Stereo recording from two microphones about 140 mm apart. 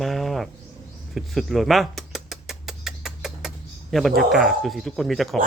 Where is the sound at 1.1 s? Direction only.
Centre (ahead or behind).